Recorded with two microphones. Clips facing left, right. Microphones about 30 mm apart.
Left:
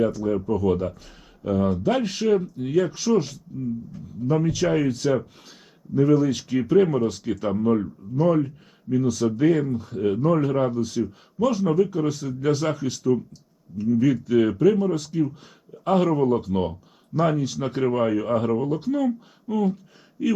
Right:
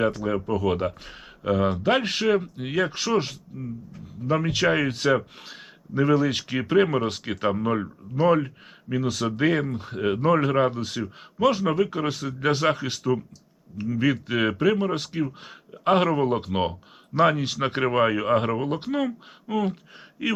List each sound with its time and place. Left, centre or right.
0.0 s speech: right